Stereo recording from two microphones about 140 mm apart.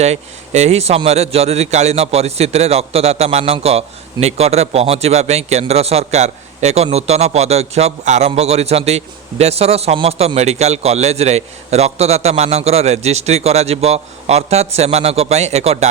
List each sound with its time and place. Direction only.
0.0 s a man's voice: 50° right (ahead or behind)